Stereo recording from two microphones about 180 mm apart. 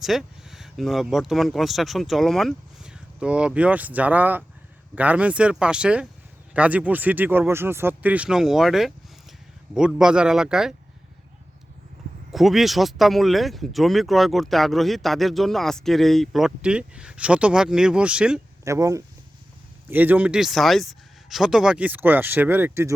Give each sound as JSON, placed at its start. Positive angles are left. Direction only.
{"t": 0.0, "sound": "speech", "side_deg": 0}
{"t": 12.3, "sound": "speech", "side_deg": 0}
{"t": 18.6, "sound": "speech", "side_deg": -15}